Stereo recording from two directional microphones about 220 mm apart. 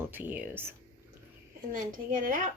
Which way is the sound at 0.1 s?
10° right (ahead or behind).